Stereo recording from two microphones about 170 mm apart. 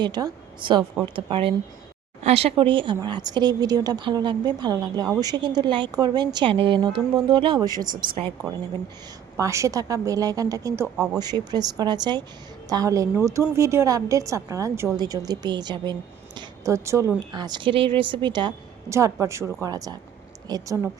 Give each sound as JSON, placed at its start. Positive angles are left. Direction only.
{"t": 0.0, "sound": "a woman's voice", "side_deg": -25}
{"t": 9.4, "sound": "a woman's voice", "side_deg": -15}
{"t": 10.9, "sound": "speech", "side_deg": -5}
{"t": 11.2, "sound": "a woman's voice", "side_deg": -25}